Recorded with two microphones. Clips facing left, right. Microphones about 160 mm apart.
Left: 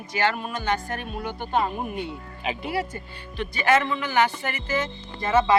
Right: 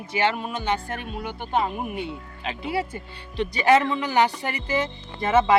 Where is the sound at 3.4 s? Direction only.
30° right (ahead or behind).